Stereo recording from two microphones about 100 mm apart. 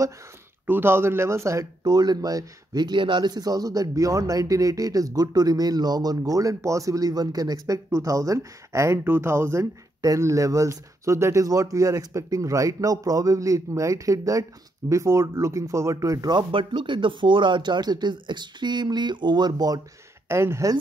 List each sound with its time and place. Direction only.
0.7 s speech: 20° right (ahead or behind); by 19.8 s 45° right (ahead or behind)
20.2 s speech: 25° right (ahead or behind)